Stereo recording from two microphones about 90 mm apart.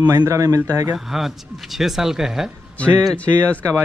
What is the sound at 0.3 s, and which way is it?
Speech, 35° right (ahead or behind).